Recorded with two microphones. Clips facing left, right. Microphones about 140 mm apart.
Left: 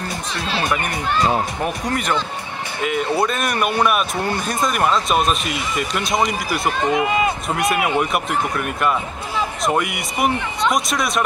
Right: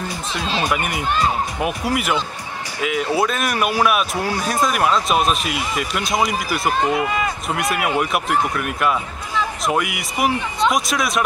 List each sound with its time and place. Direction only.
0.7 s a man's voice: 5° right (ahead or behind)
7.0 s speech: 20° left (ahead or behind)
7.7 s a man's voice: centre (ahead or behind)